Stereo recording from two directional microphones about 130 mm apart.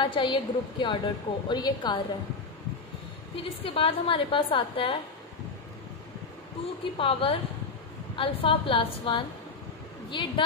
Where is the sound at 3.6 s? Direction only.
45° left (ahead or behind).